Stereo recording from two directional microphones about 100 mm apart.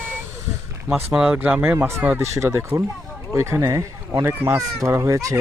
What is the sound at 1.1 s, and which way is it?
Speech, 10° right (ahead or behind).